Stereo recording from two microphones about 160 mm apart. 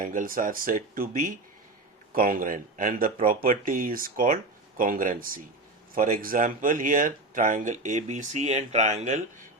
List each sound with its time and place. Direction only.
0.0 s speech: 60° right (ahead or behind)